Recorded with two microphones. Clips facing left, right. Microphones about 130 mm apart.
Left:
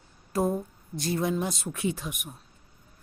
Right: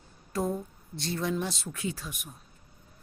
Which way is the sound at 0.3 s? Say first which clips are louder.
Left 4 dB; 25° left (ahead or behind).